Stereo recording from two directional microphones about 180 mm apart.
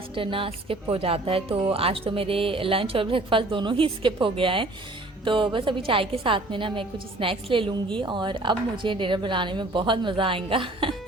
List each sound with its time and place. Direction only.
0.1 s a woman's voice: 30° right (ahead or behind)